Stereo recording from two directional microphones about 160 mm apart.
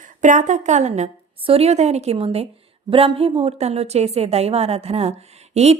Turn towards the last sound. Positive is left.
turn(degrees=-40)  # may be behind; listen again after turning